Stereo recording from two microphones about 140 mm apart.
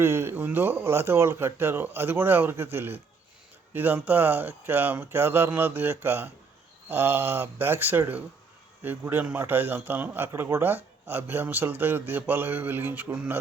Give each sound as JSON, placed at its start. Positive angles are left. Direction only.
{"t": 0.0, "sound": "speech", "side_deg": -15}